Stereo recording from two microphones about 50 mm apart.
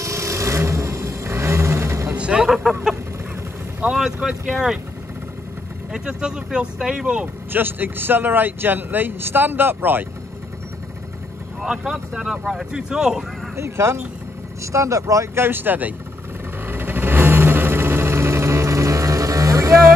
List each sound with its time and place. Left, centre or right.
0.0 s vehicle: right
2.1 s music: right
2.4 s a sound: centre
3.9 s speech: centre
5.9 s speech: centre
7.5 s speech: right
11.6 s speech: centre
13.6 s speech: right
14.6 s speech: right
15.4 s speech: right
16.6 s vehicle: right